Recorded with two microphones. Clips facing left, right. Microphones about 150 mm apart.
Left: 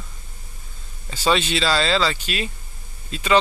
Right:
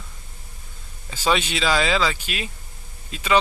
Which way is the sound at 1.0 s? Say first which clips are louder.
Left 2 dB; 10° right (ahead or behind).